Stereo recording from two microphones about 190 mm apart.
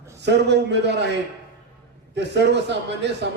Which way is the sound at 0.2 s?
65° right (ahead or behind).